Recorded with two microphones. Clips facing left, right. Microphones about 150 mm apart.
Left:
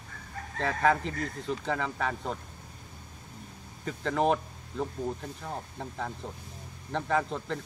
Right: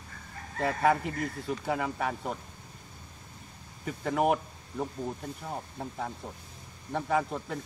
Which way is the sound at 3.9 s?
10° right (ahead or behind).